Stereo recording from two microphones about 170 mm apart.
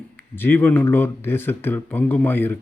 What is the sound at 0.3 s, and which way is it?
Speech, 10° left (ahead or behind).